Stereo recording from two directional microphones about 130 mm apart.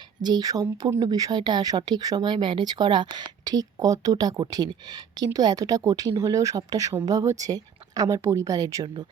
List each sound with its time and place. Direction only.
0.2 s speech: 35° right (ahead or behind)